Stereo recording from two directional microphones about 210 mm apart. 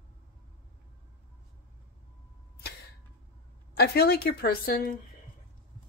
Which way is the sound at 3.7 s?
50° left (ahead or behind).